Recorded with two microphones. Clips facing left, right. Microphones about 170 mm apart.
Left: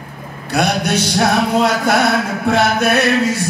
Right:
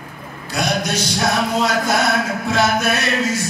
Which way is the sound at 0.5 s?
60° left (ahead or behind).